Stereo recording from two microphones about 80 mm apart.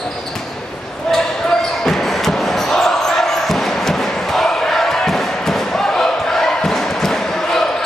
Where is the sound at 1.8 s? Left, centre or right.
Centre.